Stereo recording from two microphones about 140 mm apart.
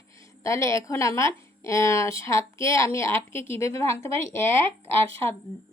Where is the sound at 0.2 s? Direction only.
20° left (ahead or behind).